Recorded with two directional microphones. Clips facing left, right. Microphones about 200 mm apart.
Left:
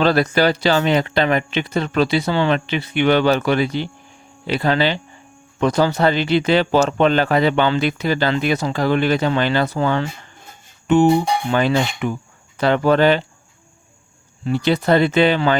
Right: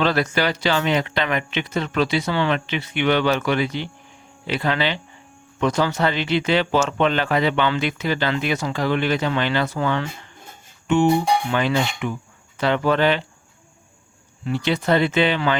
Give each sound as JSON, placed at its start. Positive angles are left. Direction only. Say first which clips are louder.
{"t": 0.0, "sound": "speech", "louder": "left 5 dB", "side_deg": 35}
{"t": 14.4, "sound": "speech", "louder": "left 4 dB", "side_deg": 35}